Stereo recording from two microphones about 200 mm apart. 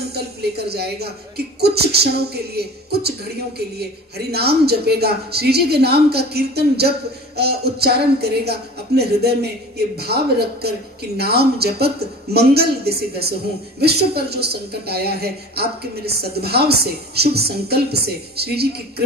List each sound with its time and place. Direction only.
0.1 s speech: 55° right (ahead or behind)